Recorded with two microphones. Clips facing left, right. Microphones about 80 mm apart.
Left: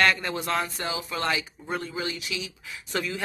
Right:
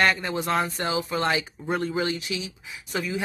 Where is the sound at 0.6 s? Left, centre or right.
Right.